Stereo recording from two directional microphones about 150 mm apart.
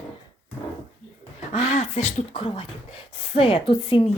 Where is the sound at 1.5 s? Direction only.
45° left (ahead or behind).